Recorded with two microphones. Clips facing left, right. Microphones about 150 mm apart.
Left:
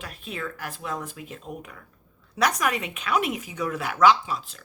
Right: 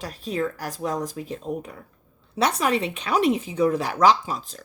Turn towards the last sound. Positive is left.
turn(degrees=-40)  # may be behind; listen again after turning